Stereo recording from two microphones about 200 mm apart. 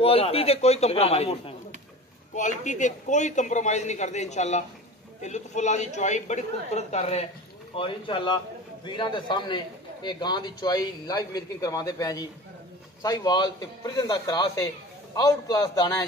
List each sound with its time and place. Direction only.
0.0 s a man's voice: 30° left (ahead or behind)